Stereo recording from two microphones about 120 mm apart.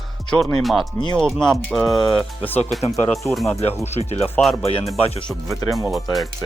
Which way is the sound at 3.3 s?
Centre (ahead or behind).